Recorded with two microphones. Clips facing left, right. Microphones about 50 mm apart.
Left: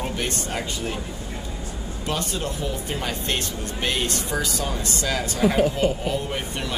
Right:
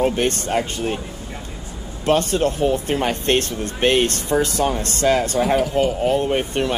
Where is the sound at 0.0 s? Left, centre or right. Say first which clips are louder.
Right 8 dB; right.